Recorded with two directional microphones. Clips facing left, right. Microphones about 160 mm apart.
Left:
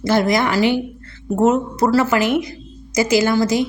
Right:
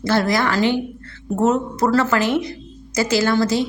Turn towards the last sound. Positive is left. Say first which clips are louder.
# left 1 dB
turn(degrees=15)  # may be behind; listen again after turning